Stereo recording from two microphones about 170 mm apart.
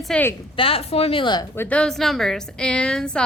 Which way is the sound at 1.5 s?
5° left (ahead or behind).